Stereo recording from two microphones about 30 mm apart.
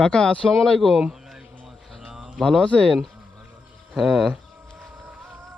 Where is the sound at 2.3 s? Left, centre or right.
Centre.